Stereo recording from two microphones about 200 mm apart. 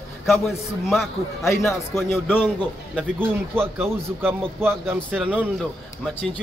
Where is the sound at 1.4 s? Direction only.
15° left (ahead or behind).